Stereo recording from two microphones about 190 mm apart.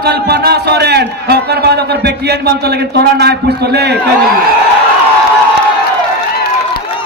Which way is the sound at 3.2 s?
60° right (ahead or behind).